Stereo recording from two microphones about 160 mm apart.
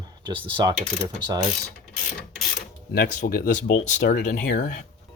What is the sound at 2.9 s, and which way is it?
Speech, 80° left.